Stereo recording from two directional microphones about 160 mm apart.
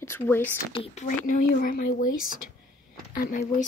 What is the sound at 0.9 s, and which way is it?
Speech, 55° left (ahead or behind).